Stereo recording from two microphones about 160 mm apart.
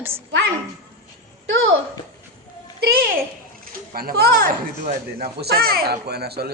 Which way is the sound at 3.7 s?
65° right (ahead or behind).